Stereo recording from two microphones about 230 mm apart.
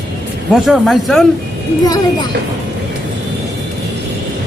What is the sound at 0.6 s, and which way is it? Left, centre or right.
Speech, centre.